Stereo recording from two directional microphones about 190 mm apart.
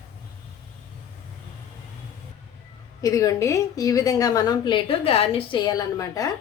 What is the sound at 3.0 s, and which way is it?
A woman's voice, 15° left (ahead or behind).